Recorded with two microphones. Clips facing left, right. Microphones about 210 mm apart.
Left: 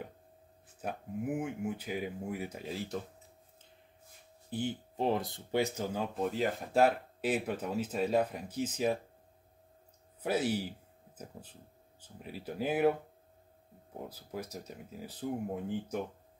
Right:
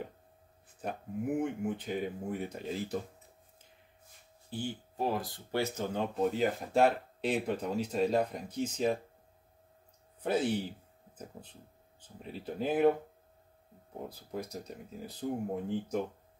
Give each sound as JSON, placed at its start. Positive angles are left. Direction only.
{"t": 0.7, "sound": "speech", "side_deg": 5}
{"t": 4.5, "sound": "speech", "side_deg": 20}
{"t": 10.2, "sound": "speech", "side_deg": 5}
{"t": 12.3, "sound": "speech", "side_deg": 5}
{"t": 14.3, "sound": "speech", "side_deg": 5}